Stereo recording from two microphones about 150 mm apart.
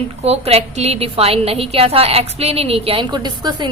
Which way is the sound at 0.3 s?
45° right (ahead or behind).